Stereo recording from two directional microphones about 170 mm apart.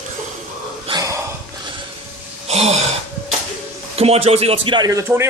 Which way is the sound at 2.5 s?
40° right (ahead or behind).